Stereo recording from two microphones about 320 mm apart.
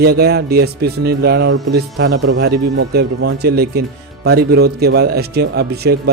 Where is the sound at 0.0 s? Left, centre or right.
Right.